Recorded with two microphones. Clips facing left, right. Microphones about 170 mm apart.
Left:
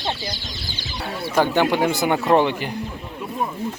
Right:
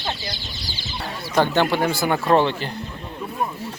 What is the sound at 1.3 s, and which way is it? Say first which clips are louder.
Speech: even; 10° left (ahead or behind).